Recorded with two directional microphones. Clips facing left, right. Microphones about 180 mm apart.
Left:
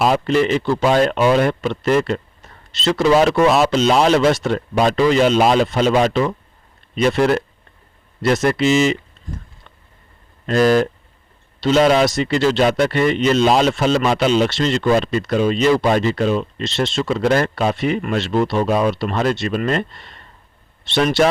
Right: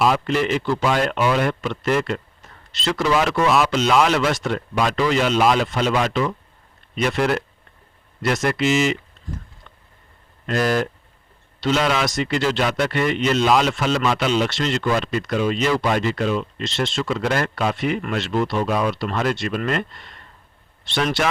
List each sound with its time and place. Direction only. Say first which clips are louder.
0.3 s speech: left 4 dB; 30° left (ahead or behind)
10.4 s speech: left 6 dB; 35° left (ahead or behind)